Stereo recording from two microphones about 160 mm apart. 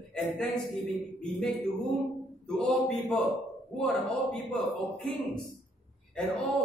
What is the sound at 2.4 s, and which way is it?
Speech, 5° left (ahead or behind).